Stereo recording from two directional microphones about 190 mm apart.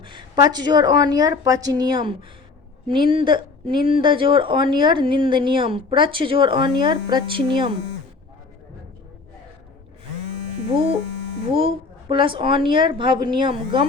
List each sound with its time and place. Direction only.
0.0 s speech: 25° right (ahead or behind)
11.5 s speech: 25° right (ahead or behind)